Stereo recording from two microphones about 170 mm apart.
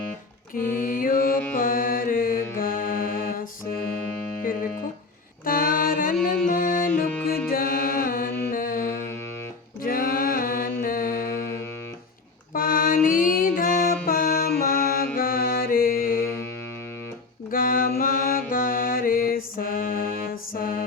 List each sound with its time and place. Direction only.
0.8 s mantra: 55° left (ahead or behind)
5.5 s mantra: 55° left (ahead or behind)
6.5 s music: 55° left (ahead or behind)
9.8 s mantra: 55° left (ahead or behind)
12.5 s music: 55° left (ahead or behind)
17.5 s mantra: 55° left (ahead or behind)